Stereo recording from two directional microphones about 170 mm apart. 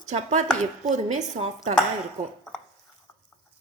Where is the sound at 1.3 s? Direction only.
40° right (ahead or behind).